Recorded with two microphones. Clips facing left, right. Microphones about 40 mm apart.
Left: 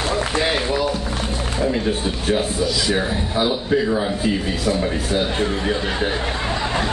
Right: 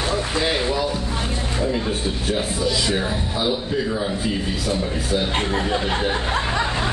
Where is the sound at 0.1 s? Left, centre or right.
Centre.